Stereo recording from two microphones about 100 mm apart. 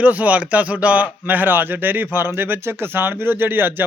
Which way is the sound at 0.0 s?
15° right (ahead or behind).